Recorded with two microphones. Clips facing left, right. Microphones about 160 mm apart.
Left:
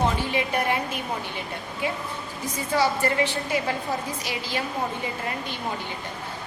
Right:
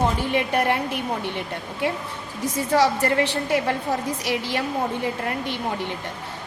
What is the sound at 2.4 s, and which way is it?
A woman's voice, 75° right (ahead or behind).